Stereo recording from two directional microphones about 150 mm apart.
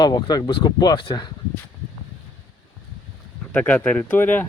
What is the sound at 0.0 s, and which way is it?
Speech, 25° left (ahead or behind).